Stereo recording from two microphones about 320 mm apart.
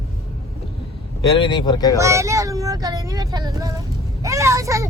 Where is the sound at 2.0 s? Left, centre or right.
Centre.